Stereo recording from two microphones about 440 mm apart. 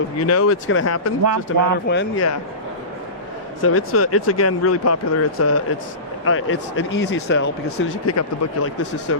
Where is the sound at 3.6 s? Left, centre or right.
Left.